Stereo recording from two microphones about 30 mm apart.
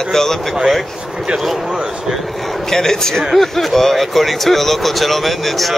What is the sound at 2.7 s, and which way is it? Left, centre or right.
A man's voice, centre.